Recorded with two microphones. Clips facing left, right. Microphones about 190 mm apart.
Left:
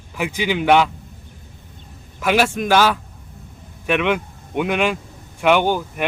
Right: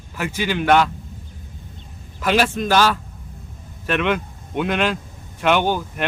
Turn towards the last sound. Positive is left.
turn(degrees=10)  # may be behind; listen again after turning